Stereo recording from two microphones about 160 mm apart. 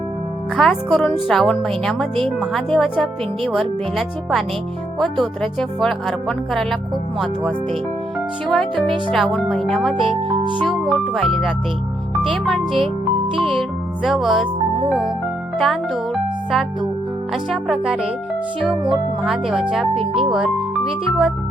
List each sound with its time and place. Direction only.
0.5 s speech: 5° left (ahead or behind)
10.0 s speech: 35° right (ahead or behind)
10.8 s speech: centre (ahead or behind)
15.6 s speech: centre (ahead or behind)
19.9 s speech: 35° right (ahead or behind)
20.3 s speech: 5° right (ahead or behind)